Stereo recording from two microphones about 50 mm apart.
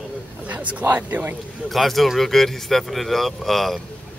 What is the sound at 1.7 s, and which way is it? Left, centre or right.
Speech, centre.